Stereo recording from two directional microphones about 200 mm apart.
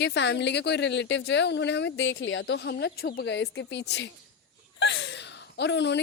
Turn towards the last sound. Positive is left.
turn(degrees=60)  # may be behind; listen again after turning